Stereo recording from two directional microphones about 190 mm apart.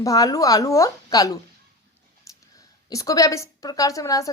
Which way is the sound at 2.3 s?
15° left (ahead or behind).